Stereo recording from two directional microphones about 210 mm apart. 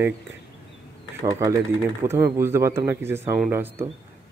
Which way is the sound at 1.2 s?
15° right (ahead or behind).